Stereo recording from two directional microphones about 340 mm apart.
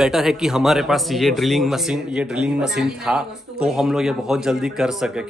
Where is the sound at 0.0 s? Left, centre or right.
Centre.